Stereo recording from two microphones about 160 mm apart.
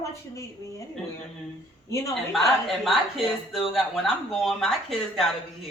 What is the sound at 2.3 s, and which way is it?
Speech, centre (ahead or behind).